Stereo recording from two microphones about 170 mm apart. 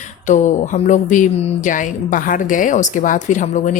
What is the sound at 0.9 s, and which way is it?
A woman's voice, 50° left (ahead or behind).